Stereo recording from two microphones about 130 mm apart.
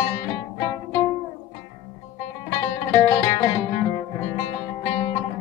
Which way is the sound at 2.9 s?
25° left (ahead or behind).